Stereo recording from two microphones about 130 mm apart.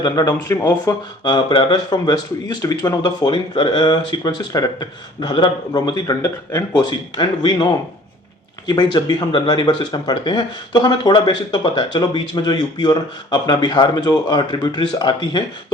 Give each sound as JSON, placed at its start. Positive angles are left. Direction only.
{"t": 0.0, "sound": "speech", "side_deg": 25}